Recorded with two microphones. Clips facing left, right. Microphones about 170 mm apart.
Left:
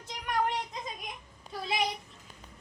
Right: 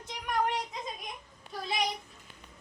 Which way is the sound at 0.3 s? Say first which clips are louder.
Even; centre (ahead or behind).